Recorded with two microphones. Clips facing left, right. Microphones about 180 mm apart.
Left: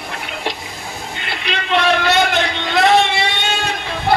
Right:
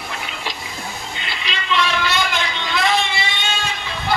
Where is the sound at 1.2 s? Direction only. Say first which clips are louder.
Left 7 dB; 55° left (ahead or behind).